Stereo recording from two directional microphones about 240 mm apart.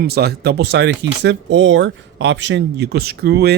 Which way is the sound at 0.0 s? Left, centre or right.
Right.